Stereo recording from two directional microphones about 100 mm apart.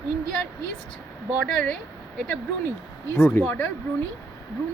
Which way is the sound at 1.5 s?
10° left (ahead or behind).